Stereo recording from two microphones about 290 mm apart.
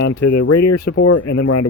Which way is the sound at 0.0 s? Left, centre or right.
Left.